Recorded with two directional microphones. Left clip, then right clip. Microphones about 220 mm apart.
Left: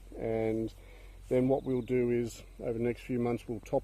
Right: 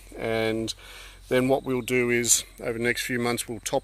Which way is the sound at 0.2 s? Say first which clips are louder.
Right 6 dB; 15° right (ahead or behind).